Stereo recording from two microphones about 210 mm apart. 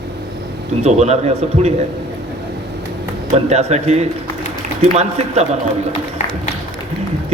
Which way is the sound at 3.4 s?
30° right (ahead or behind).